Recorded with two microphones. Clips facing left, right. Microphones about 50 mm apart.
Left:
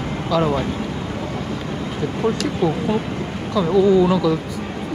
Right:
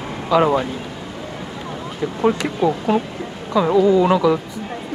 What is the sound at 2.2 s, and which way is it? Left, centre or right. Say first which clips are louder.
Speech: right 3 dB; right.